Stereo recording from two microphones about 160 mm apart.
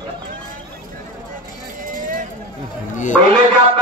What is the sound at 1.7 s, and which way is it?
Vehicle, 55° right (ahead or behind).